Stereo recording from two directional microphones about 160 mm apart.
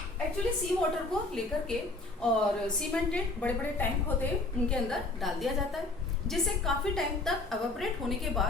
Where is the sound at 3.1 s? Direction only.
10° left (ahead or behind).